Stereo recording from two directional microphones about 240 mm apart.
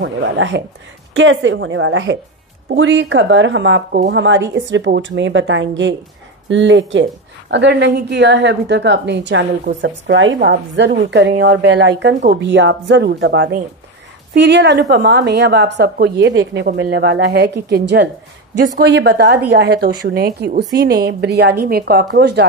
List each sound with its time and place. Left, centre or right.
0.0 s a woman's voice: right